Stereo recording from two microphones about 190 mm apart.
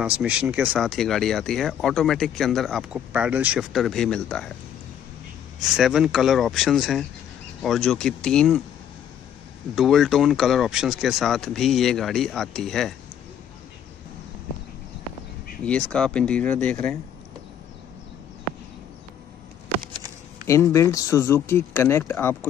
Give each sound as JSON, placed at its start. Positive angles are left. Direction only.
{"t": 0.0, "sound": "speech", "side_deg": -5}
{"t": 5.8, "sound": "speech", "side_deg": 0}
{"t": 9.8, "sound": "speech", "side_deg": 0}
{"t": 15.6, "sound": "speech", "side_deg": 5}
{"t": 20.4, "sound": "speech", "side_deg": 15}